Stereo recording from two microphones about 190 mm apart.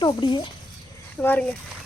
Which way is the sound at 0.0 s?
25° left (ahead or behind).